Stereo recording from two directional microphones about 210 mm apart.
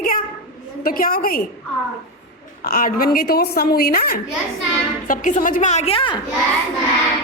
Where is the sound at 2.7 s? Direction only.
40° left (ahead or behind); by 6.2 s 25° left (ahead or behind).